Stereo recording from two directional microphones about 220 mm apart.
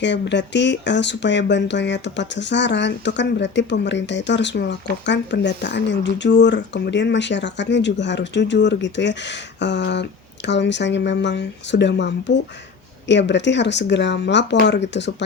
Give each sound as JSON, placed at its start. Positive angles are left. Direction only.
{"t": 0.0, "sound": "speech", "side_deg": 55}